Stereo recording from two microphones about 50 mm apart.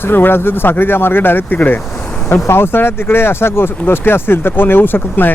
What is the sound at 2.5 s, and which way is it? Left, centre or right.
Speech, left.